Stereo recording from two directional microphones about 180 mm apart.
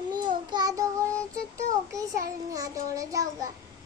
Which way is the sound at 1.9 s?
20° right (ahead or behind).